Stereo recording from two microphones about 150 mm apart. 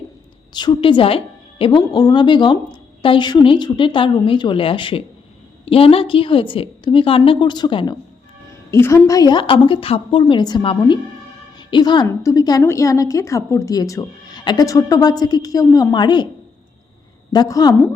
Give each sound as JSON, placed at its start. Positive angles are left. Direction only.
{"t": 0.5, "sound": "a woman's voice", "side_deg": 30}
{"t": 1.8, "sound": "a woman's voice", "side_deg": 25}
{"t": 8.7, "sound": "a woman's voice", "side_deg": 15}
{"t": 17.3, "sound": "a woman's voice", "side_deg": 25}